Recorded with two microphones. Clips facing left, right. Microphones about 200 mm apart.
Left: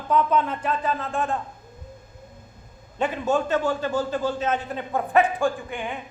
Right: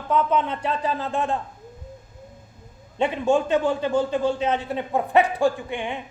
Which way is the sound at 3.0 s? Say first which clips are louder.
Right 3 dB; 25° right (ahead or behind).